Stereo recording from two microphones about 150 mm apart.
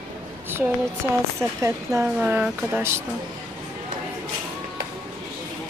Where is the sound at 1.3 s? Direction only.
20° right (ahead or behind).